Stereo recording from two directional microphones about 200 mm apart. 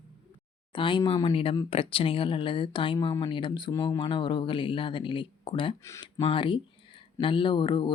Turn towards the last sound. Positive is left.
turn(degrees=25)  # may be behind; listen again after turning